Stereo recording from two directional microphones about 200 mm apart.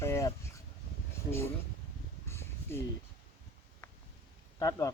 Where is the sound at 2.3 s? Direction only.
10° left (ahead or behind).